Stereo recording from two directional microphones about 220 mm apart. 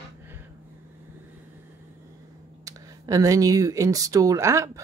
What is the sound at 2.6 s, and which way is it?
Speech, 15° right (ahead or behind).